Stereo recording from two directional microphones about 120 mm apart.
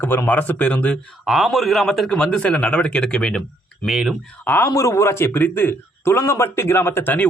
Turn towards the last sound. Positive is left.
turn(degrees=15)  # may be behind; listen again after turning